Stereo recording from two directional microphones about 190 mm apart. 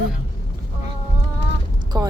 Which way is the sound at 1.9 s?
20° right (ahead or behind).